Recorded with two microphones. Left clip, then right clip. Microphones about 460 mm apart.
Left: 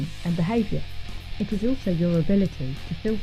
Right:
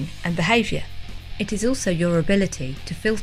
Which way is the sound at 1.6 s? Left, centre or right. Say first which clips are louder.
Right 5 dB; right.